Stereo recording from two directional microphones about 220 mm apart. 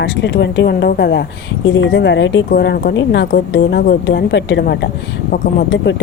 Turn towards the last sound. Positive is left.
turn(degrees=50)  # may be behind; listen again after turning